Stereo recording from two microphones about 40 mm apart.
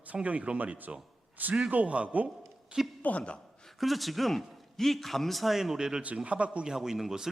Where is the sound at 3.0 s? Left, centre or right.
Left.